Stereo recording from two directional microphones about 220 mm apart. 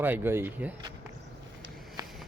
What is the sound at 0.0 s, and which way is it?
Speech, 10° right (ahead or behind).